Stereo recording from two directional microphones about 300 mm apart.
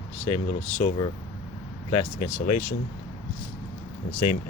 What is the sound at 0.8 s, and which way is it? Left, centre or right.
Speech, left.